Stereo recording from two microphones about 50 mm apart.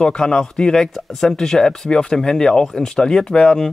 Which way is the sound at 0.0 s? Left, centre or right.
Centre.